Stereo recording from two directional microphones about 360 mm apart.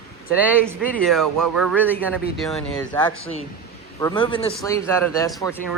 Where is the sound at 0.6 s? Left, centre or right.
Centre.